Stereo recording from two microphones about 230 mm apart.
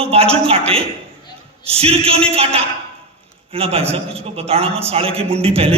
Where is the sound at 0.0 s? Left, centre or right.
Right.